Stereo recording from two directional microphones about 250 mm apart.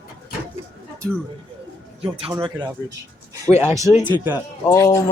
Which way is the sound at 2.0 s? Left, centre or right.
Right.